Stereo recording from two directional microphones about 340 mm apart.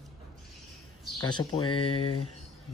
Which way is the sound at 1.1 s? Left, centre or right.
Centre.